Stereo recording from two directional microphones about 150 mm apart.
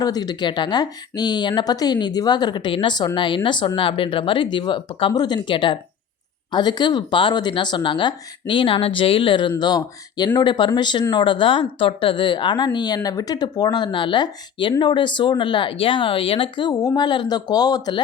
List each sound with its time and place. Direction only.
0.0 s speech: 25° left (ahead or behind)